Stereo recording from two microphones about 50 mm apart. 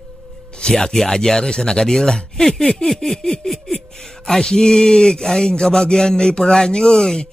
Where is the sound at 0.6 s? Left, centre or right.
Centre.